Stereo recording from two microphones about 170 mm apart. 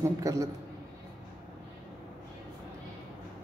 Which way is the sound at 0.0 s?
20° right (ahead or behind).